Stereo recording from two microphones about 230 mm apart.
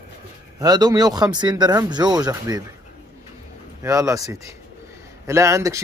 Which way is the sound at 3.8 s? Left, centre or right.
Centre.